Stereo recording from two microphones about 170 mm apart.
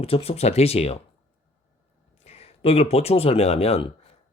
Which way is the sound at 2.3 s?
35° left (ahead or behind).